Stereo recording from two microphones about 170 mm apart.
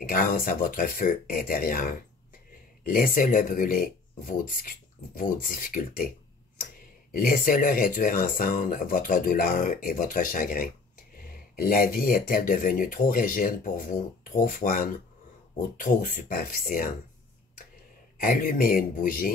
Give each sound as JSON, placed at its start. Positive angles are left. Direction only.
{"t": 0.1, "sound": "speech", "side_deg": 55}
{"t": 7.2, "sound": "speech", "side_deg": 55}
{"t": 18.2, "sound": "speech", "side_deg": 55}